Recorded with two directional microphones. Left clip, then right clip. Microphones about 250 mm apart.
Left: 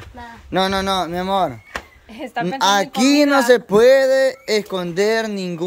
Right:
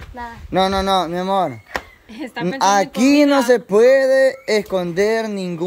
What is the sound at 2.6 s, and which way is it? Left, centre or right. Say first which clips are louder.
Speech: right 1 dB; centre.